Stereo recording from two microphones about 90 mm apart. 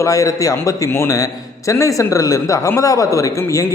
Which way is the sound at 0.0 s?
40° left (ahead or behind).